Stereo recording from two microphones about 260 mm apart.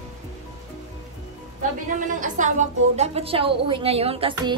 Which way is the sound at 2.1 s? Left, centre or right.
Right.